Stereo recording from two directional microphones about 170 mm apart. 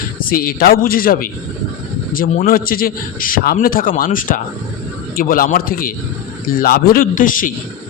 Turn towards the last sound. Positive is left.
turn(degrees=55)  # may be behind; listen again after turning